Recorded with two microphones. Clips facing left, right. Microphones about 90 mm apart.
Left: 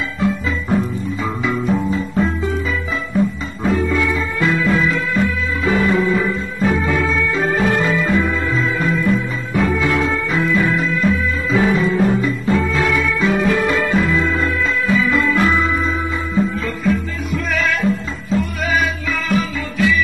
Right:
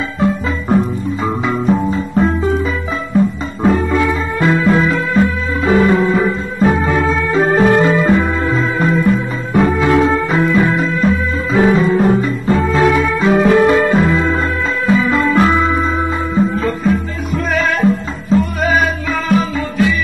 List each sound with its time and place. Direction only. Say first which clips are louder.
1.2 s music: right 4 dB; 40° right (ahead or behind)
3.6 s music: right 4 dB; 40° right (ahead or behind)